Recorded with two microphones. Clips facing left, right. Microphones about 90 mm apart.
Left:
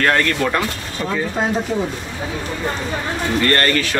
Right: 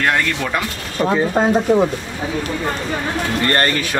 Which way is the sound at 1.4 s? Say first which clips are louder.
Right 5 dB; 45° right (ahead or behind).